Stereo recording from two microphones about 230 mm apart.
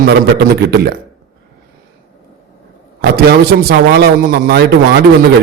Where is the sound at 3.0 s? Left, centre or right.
Right.